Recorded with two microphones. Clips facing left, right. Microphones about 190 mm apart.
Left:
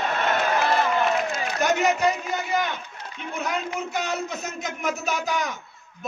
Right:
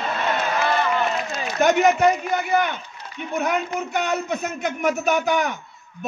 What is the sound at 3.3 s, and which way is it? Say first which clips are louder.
A man's voice: right 5 dB; 60° right (ahead or behind).